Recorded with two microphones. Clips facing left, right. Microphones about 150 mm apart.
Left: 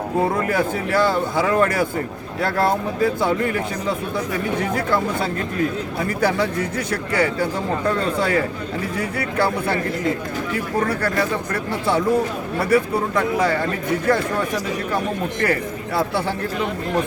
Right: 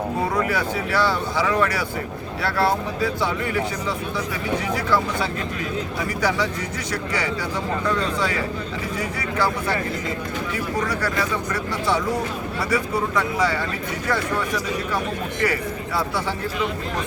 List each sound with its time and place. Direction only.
0.4 s speech: 50° left (ahead or behind)
10.8 s speech: 55° left (ahead or behind)
12.5 s speech: 55° left (ahead or behind)